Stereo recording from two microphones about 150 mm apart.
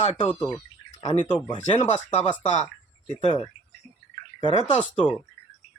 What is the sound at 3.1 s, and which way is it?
Speech, 40° left (ahead or behind).